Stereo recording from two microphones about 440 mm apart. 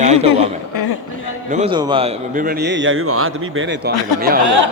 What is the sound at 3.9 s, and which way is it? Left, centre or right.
Speech, left.